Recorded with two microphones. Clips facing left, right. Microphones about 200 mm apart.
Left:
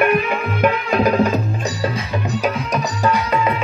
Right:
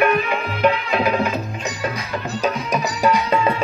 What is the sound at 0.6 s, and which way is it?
Music, 45° left (ahead or behind).